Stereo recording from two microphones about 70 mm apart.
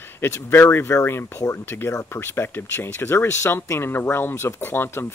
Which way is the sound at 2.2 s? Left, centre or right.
Left.